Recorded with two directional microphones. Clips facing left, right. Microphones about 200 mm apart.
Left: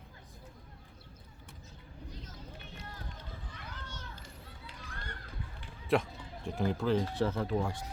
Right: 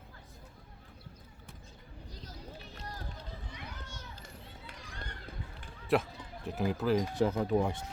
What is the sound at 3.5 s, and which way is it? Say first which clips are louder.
Children playing: right 1 dB; 10° right (ahead or behind).